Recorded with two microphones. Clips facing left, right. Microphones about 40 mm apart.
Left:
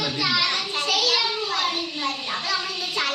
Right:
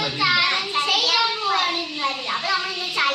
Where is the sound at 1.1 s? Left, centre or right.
Right.